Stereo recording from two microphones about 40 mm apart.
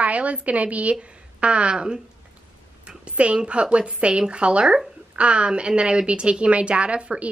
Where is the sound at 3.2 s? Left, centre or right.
Right.